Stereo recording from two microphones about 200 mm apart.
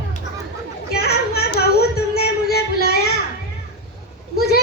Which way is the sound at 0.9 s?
55° left (ahead or behind).